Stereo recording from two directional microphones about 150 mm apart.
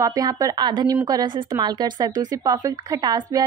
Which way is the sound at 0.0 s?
25° right (ahead or behind).